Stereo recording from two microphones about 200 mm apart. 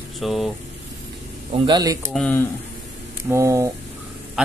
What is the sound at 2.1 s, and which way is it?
Speech, 5° left (ahead or behind).